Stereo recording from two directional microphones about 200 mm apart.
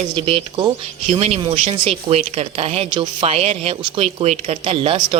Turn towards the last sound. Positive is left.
turn(degrees=-30)  # may be behind; listen again after turning